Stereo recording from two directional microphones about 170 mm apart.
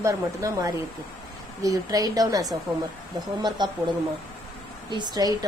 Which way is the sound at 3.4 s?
25° right (ahead or behind).